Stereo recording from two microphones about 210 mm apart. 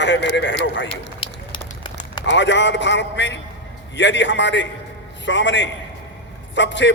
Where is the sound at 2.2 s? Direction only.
60° left (ahead or behind).